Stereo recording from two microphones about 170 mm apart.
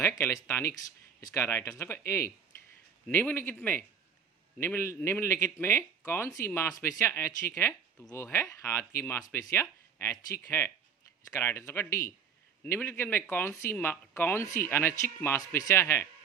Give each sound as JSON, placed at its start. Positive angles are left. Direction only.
{"t": 0.2, "sound": "speech", "side_deg": 15}